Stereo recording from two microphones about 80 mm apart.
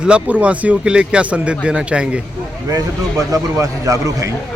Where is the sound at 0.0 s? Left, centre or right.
Centre.